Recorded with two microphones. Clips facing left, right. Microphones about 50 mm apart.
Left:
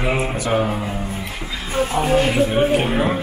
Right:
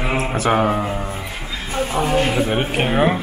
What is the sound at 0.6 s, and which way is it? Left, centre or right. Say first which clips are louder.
Speech: right 4 dB; right.